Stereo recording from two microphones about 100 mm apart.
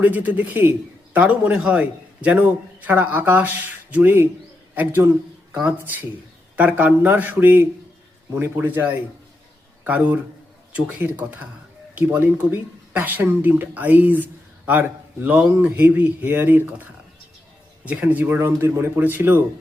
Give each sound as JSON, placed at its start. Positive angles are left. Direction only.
{"t": 0.0, "sound": "a man's voice", "side_deg": -15}
{"t": 17.8, "sound": "a man's voice", "side_deg": -15}